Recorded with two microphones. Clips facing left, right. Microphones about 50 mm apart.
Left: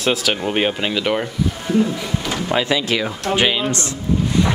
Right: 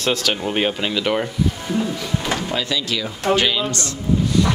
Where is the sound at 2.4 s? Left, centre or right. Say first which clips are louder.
Left 4 dB; left.